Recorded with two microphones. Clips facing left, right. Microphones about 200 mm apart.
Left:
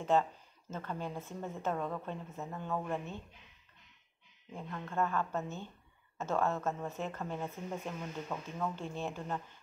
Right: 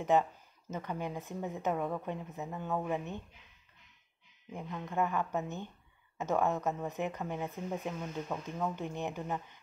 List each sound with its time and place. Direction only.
0.0 s speech: 15° right (ahead or behind)
4.5 s speech: 15° right (ahead or behind)